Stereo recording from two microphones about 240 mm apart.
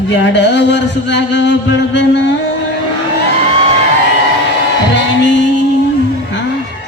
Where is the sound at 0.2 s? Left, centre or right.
Left.